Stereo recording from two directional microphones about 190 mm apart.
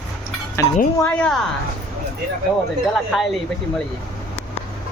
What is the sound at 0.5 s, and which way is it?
Speech, 15° left (ahead or behind).